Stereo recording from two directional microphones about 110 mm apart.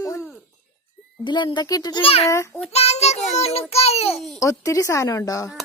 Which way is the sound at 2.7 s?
75° left (ahead or behind).